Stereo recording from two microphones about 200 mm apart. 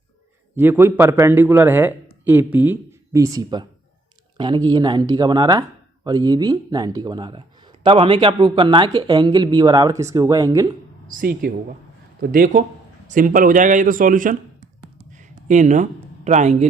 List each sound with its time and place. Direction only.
0.5 s speech: 10° right (ahead or behind)
11.1 s a man's voice: 45° right (ahead or behind)
15.1 s a sound: 40° right (ahead or behind)